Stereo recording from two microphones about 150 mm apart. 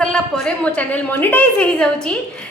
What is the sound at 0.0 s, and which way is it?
A woman's voice, 5° left (ahead or behind).